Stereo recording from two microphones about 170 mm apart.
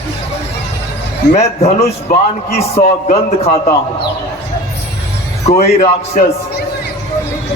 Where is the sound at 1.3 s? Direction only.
40° left (ahead or behind).